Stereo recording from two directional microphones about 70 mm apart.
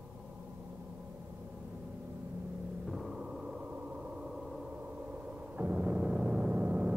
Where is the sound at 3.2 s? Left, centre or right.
Centre.